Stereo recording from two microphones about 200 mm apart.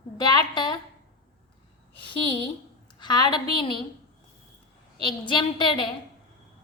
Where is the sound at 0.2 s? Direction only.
20° left (ahead or behind).